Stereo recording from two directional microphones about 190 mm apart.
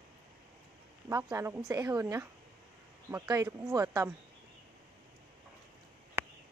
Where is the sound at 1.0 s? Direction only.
15° right (ahead or behind).